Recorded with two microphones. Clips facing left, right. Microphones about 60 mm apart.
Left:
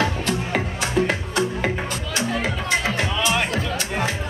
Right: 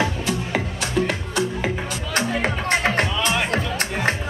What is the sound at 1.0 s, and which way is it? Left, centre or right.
Music, left.